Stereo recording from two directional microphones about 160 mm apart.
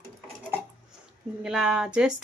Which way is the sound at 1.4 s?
5° right (ahead or behind).